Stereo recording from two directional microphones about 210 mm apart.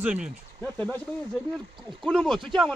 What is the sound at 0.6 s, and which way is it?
Speech, 10° left (ahead or behind).